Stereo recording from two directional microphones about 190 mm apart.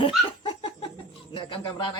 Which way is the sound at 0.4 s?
25° left (ahead or behind).